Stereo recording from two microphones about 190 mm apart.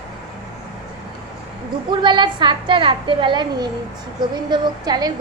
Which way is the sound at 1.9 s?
25° right (ahead or behind).